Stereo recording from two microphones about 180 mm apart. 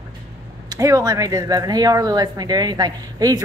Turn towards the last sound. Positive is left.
turn(degrees=-20)  # may be behind; listen again after turning